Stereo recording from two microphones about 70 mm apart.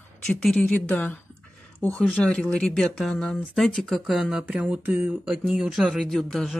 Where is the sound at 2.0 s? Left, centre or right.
Centre.